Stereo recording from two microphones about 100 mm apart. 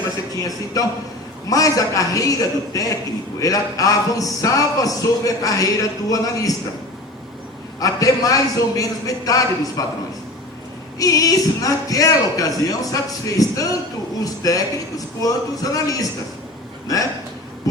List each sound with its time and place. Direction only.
0.3 s speech: 35° left (ahead or behind)
7.8 s speech: 35° left (ahead or behind)
11.0 s speech: 35° left (ahead or behind)